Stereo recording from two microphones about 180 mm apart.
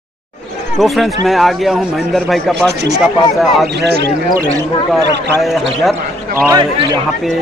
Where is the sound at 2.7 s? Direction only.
65° right (ahead or behind).